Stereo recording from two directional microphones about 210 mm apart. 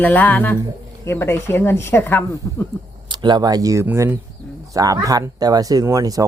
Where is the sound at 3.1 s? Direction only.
20° right (ahead or behind).